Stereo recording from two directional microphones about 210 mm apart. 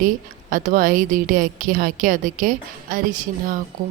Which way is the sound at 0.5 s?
40° right (ahead or behind).